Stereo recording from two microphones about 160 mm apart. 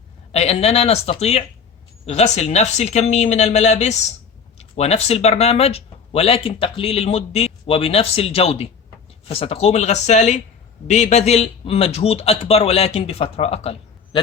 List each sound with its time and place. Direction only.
0.3 s speech: 40° left (ahead or behind)